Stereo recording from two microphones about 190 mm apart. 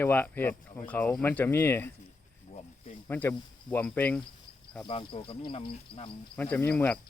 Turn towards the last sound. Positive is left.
turn(degrees=10)  # may be behind; listen again after turning